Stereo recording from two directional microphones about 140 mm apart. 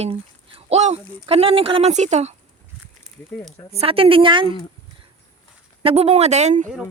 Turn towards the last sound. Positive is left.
turn(degrees=-60)  # may be behind; listen again after turning